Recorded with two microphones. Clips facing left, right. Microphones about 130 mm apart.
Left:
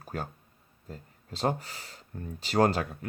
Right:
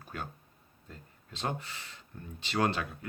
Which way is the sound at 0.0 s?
40° left (ahead or behind).